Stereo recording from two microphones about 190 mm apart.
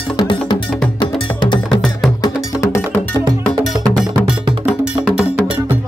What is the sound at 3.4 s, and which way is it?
Music, centre (ahead or behind).